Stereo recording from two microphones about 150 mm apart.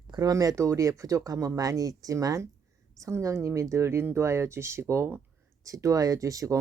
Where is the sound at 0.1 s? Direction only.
25° right (ahead or behind).